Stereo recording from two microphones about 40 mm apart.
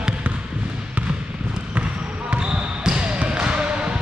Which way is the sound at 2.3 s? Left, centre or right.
Right.